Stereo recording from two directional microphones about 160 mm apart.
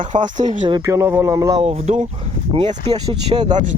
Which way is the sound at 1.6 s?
45° right (ahead or behind).